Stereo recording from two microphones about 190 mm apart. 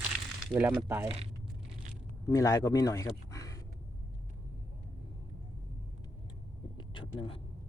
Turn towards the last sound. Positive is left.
turn(degrees=25)  # may be behind; listen again after turning